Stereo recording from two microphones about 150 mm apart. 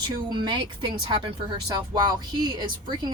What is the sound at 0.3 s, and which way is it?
Speech, 30° right (ahead or behind).